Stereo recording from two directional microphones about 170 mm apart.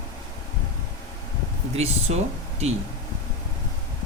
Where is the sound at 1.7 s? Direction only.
40° right (ahead or behind).